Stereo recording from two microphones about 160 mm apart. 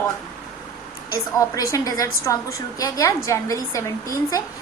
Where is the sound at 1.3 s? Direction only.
20° left (ahead or behind).